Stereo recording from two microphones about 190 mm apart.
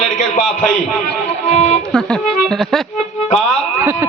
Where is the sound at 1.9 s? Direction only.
5° left (ahead or behind).